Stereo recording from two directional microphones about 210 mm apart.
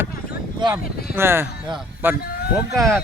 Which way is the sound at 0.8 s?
45° left (ahead or behind).